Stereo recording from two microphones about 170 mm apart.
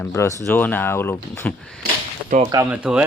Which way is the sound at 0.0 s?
15° left (ahead or behind).